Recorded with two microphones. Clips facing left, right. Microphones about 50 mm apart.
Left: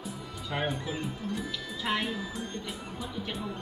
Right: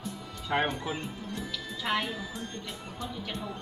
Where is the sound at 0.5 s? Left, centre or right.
Right.